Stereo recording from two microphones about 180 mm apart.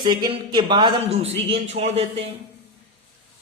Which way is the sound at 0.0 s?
25° right (ahead or behind).